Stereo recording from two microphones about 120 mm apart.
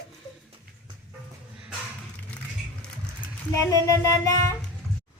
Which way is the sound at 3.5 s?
25° left (ahead or behind).